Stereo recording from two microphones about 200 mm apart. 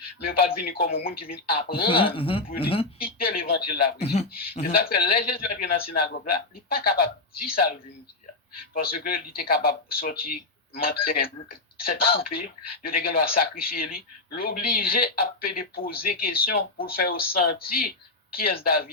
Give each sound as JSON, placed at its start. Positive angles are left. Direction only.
{"t": 0.2, "sound": "speech", "side_deg": 50}
{"t": 1.9, "sound": "speech", "side_deg": 25}
{"t": 3.0, "sound": "speech", "side_deg": 45}
{"t": 8.7, "sound": "speech", "side_deg": 45}